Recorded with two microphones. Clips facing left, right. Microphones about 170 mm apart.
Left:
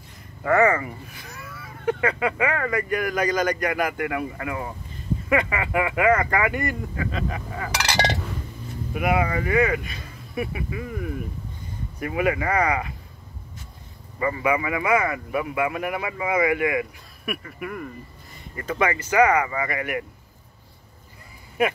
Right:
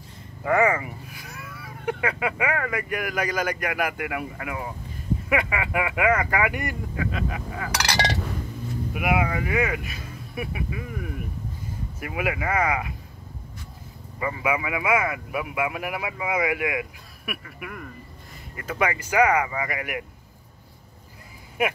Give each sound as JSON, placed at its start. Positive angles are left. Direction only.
{"t": 0.4, "sound": "speech", "side_deg": -15}
{"t": 7.7, "sound": "speech", "side_deg": 25}
{"t": 8.9, "sound": "speech", "side_deg": -5}
{"t": 12.0, "sound": "speech", "side_deg": -5}
{"t": 14.2, "sound": "speech", "side_deg": -5}